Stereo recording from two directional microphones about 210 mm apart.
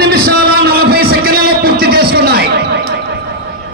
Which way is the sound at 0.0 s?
45° right (ahead or behind).